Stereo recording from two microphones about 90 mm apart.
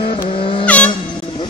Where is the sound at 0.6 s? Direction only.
15° left (ahead or behind).